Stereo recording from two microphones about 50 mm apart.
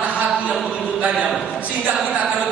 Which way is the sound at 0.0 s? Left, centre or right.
Right.